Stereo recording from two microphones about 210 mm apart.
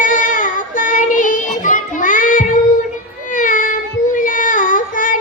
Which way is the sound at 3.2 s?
40° left (ahead or behind).